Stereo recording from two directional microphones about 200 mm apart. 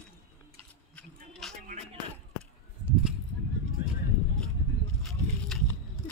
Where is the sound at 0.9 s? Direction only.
5° left (ahead or behind).